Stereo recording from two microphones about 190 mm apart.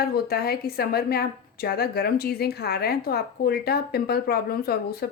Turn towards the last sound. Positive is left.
turn(degrees=55)  # may be behind; listen again after turning